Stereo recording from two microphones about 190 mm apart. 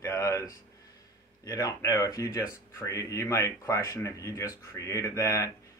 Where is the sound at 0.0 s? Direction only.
15° left (ahead or behind).